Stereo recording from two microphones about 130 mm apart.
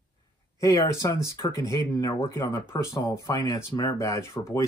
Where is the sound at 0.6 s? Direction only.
30° left (ahead or behind).